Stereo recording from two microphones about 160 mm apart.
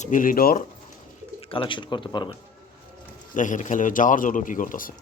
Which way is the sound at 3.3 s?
50° left (ahead or behind).